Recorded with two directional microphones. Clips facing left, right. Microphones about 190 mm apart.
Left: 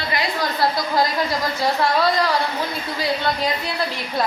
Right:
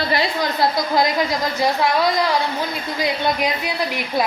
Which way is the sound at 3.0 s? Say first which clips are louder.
Right 2 dB; 15° right (ahead or behind).